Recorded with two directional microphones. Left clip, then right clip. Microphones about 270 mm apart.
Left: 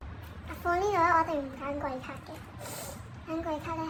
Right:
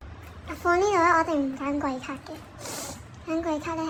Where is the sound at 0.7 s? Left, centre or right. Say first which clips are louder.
Right 5 dB; right.